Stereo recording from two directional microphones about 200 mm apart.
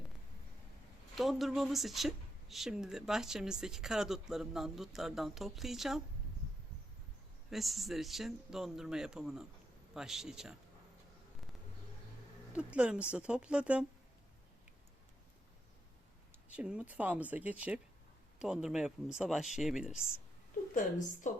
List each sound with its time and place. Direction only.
1.1 s a woman's voice: centre (ahead or behind)
7.5 s a woman's voice: centre (ahead or behind)
12.5 s a woman's voice: 5° right (ahead or behind)
16.6 s a woman's voice: 5° right (ahead or behind)
20.5 s a sound: 40° left (ahead or behind)
21.2 s speech: 40° left (ahead or behind)